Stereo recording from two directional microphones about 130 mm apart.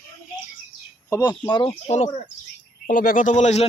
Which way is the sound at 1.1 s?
30° left (ahead or behind).